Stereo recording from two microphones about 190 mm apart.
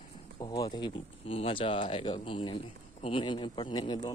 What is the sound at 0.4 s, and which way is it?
Speech, 20° left (ahead or behind).